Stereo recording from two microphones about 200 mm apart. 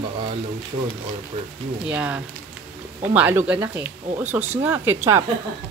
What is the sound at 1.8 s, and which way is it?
Speech, 5° right (ahead or behind).